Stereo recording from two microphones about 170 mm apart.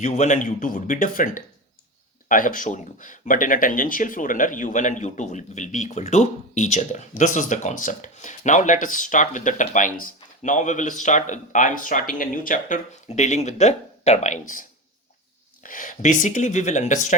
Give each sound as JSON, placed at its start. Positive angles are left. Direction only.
{"t": 0.0, "sound": "speech", "side_deg": 45}
{"t": 15.6, "sound": "speech", "side_deg": 50}